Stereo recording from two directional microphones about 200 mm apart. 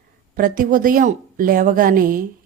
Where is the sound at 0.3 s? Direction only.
45° right (ahead or behind).